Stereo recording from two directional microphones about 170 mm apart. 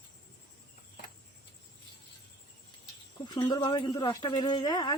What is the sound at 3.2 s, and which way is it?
Speech, 25° left (ahead or behind).